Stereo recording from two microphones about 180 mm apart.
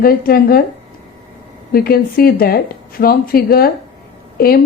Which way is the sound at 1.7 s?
55° left (ahead or behind).